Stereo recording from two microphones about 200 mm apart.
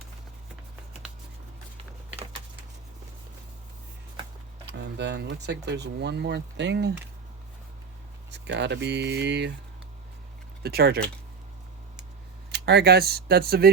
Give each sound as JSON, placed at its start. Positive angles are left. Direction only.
{"t": 4.6, "sound": "speech", "side_deg": -60}
{"t": 8.3, "sound": "speech", "side_deg": -60}
{"t": 10.6, "sound": "speech", "side_deg": -50}
{"t": 12.5, "sound": "speech", "side_deg": -55}